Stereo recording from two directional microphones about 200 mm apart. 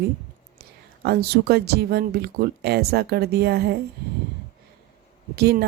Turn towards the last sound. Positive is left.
turn(degrees=-50)  # may be behind; listen again after turning